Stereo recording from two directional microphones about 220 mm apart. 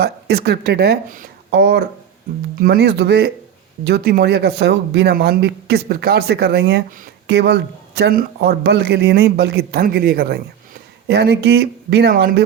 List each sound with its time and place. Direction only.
0.0 s speech: 45° right (ahead or behind)